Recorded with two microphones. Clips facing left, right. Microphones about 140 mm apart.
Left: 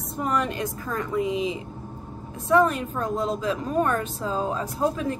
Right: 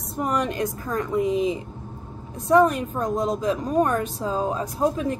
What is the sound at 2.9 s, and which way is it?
Speech, 15° right (ahead or behind).